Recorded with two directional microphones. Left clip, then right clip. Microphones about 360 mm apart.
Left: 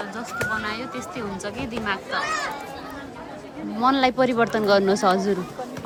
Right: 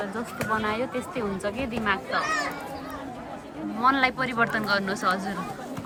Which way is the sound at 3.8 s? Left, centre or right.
Centre.